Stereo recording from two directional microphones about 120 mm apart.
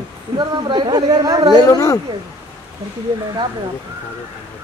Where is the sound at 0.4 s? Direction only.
40° right (ahead or behind).